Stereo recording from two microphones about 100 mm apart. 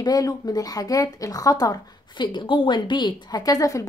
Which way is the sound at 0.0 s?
40° left (ahead or behind).